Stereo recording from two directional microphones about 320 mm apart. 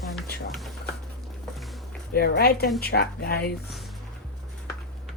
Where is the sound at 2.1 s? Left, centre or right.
Left.